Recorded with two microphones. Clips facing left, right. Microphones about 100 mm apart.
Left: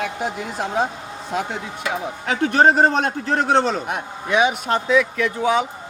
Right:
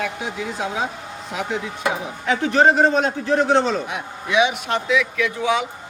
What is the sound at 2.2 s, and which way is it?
A man's voice, 45° left (ahead or behind).